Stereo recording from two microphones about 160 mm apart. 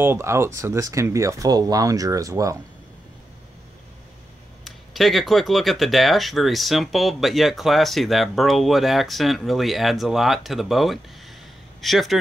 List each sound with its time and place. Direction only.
0.0 s speech: 15° right (ahead or behind)
4.6 s speech: centre (ahead or behind)